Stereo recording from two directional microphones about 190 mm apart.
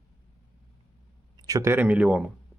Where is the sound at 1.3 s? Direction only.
20° right (ahead or behind).